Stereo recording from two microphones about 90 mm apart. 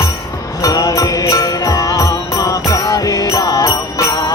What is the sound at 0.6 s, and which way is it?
Music, 40° left (ahead or behind).